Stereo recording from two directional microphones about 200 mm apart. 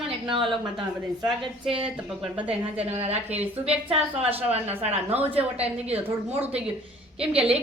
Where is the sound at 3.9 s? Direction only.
30° right (ahead or behind).